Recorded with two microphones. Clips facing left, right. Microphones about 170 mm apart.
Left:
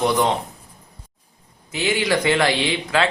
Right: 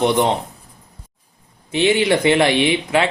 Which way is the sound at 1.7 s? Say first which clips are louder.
Right 5 dB; 25° right (ahead or behind).